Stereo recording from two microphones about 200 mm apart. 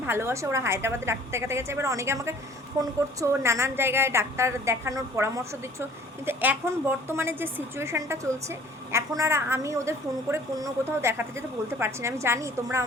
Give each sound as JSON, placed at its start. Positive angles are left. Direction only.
{"t": 0.0, "sound": "a woman's voice", "side_deg": -10}